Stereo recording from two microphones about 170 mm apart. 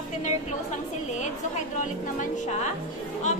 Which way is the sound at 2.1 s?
45° left (ahead or behind).